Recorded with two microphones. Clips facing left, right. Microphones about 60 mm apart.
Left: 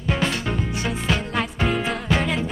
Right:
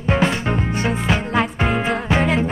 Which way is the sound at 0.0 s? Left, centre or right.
Right.